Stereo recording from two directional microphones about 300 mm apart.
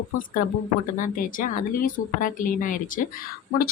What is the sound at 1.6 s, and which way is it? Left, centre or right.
A woman's voice, left.